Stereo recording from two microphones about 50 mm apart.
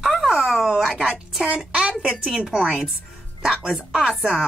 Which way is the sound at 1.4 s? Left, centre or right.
Right.